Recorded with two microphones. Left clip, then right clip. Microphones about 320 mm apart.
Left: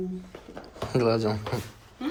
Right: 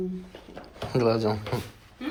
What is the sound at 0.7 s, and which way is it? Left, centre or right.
Speech, centre.